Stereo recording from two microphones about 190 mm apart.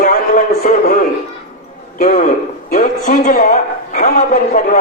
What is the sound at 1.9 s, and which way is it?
A man's voice, 45° left (ahead or behind).